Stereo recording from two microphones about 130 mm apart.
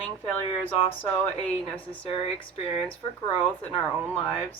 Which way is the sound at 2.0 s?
45° left (ahead or behind).